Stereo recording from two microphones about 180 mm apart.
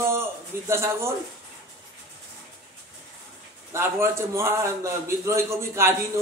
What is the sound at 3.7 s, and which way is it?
A man's voice, 15° right (ahead or behind).